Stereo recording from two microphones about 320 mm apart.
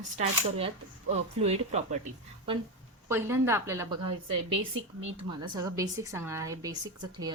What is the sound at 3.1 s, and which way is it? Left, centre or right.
Speech, centre.